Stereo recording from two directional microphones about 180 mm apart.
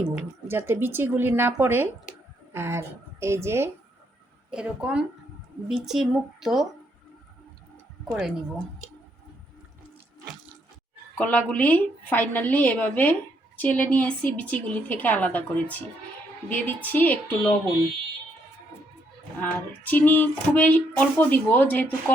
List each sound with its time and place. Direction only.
0.2 s a woman's voice: 10° right (ahead or behind)
8.0 s speech: centre (ahead or behind)
11.2 s female singing: 10° left (ahead or behind)
19.4 s female singing: 10° left (ahead or behind)